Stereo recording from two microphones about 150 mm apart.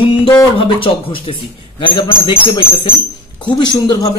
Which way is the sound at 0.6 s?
35° left (ahead or behind).